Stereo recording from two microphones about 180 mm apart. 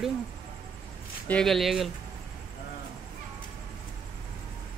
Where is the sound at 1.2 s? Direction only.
5° left (ahead or behind).